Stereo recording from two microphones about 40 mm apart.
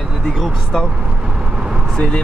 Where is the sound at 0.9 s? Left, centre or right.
Right.